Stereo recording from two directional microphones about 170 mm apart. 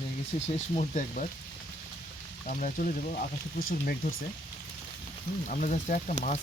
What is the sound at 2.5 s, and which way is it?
Speech, 50° left (ahead or behind).